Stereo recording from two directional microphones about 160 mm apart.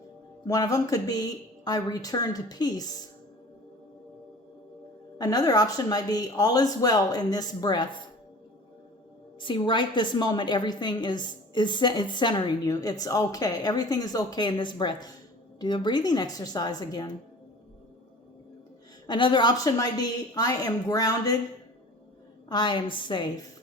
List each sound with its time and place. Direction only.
0.4 s a woman's voice: 20° left (ahead or behind)
5.1 s a woman's voice: 25° left (ahead or behind)
9.4 s a woman's voice: 30° left (ahead or behind)
19.0 s a woman's voice: 30° left (ahead or behind)
22.4 s a woman's voice: 25° left (ahead or behind)